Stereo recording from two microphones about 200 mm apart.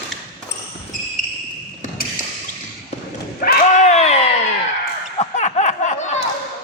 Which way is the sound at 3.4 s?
40° left (ahead or behind).